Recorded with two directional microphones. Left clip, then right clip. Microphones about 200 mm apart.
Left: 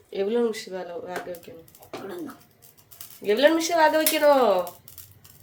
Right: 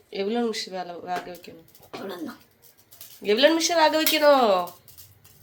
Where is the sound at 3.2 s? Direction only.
5° left (ahead or behind).